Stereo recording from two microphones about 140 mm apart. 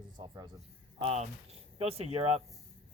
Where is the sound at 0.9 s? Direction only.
45° right (ahead or behind).